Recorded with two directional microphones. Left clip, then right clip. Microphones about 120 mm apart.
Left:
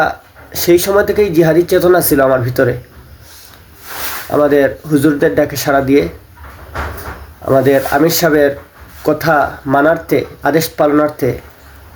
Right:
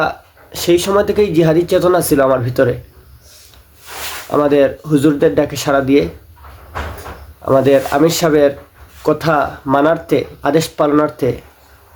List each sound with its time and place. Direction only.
0.0 s speech: 15° right (ahead or behind)
4.3 s speech: 15° right (ahead or behind)
7.4 s speech: 20° right (ahead or behind)